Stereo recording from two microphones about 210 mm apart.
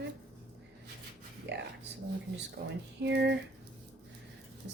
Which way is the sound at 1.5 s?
55° right (ahead or behind).